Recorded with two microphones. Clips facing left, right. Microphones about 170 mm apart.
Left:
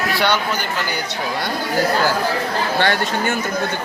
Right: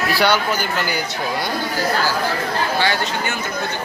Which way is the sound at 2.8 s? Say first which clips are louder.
Left 2 dB; 55° left (ahead or behind).